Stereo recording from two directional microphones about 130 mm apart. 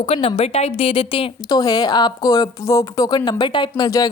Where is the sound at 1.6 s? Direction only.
30° left (ahead or behind).